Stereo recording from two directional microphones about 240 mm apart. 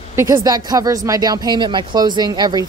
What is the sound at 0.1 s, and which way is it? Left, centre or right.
Speech, centre.